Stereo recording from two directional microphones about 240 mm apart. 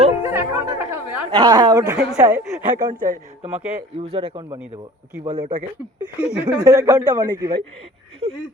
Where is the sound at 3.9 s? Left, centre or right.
Right.